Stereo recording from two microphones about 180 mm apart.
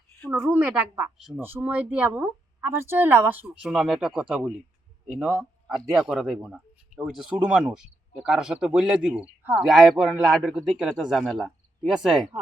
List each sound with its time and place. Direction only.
0.3 s a woman's voice: 10° right (ahead or behind)